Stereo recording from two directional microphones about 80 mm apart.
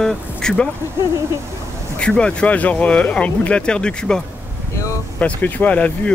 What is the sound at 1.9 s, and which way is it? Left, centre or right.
Speech, centre.